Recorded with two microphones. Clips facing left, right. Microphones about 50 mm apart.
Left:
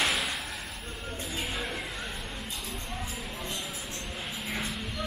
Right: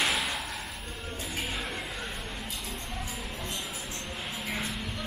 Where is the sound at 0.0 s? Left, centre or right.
Centre.